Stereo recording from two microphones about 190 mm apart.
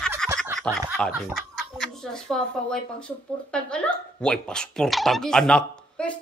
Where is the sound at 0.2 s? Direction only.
Centre (ahead or behind).